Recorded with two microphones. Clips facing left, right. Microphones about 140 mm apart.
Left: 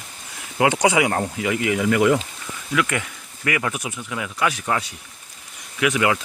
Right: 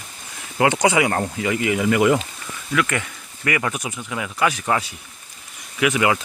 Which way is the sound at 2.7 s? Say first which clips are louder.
Right 1 dB; 10° left (ahead or behind).